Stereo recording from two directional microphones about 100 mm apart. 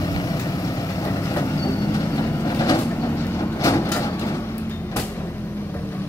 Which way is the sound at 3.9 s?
35° left (ahead or behind).